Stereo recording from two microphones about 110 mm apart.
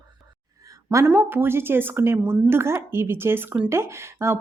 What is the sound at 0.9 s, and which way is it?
A woman's voice, 25° right (ahead or behind).